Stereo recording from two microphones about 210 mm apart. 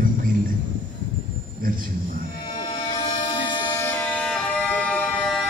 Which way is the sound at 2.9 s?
20° left (ahead or behind).